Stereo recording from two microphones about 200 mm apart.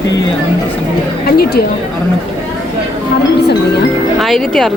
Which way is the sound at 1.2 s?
50° left (ahead or behind).